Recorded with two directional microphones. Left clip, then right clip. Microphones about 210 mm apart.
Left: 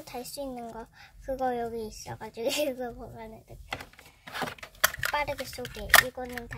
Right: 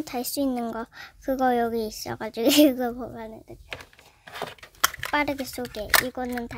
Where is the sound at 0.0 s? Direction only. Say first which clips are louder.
Right 9 dB; 50° right (ahead or behind).